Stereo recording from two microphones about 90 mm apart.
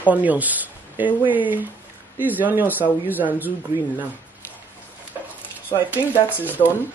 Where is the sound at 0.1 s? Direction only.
20° right (ahead or behind).